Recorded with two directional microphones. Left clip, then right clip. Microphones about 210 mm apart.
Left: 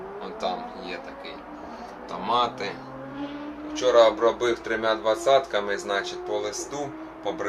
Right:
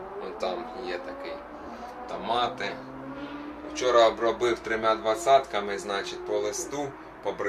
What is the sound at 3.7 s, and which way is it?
Speech, centre (ahead or behind).